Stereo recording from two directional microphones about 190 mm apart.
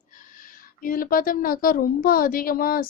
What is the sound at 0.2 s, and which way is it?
A woman's voice, 45° left (ahead or behind).